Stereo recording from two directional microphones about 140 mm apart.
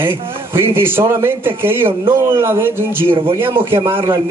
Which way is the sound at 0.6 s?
15° right (ahead or behind).